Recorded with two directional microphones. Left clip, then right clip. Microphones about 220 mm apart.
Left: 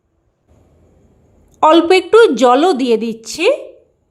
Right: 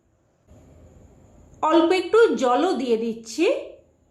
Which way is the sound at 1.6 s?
50° left (ahead or behind).